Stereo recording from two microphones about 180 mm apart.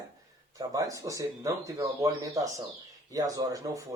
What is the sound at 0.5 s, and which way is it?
Speech, 20° right (ahead or behind).